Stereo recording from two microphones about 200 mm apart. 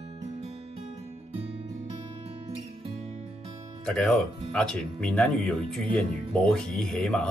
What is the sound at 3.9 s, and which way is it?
Speech, 5° left (ahead or behind).